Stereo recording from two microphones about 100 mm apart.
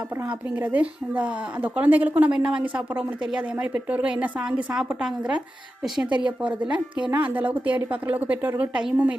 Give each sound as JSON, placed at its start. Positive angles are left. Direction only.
{"t": 0.3, "sound": "a woman's voice", "side_deg": -15}